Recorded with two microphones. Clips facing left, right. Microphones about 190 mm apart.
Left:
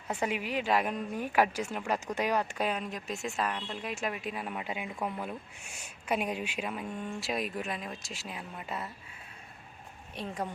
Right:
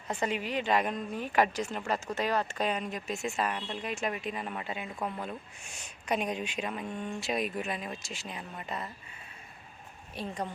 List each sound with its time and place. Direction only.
0.1 s speech: 10° left (ahead or behind)
10.2 s speech: 5° left (ahead or behind)